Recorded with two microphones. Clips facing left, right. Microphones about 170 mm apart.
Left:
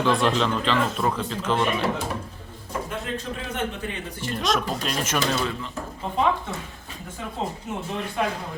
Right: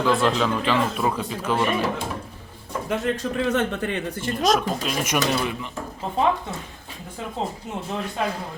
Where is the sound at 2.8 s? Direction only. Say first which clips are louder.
Right 10 dB; 85° right; by 4.2 s 60° right (ahead or behind).